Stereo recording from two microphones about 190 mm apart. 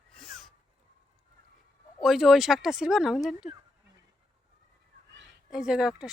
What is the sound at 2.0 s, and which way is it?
Speech, centre (ahead or behind).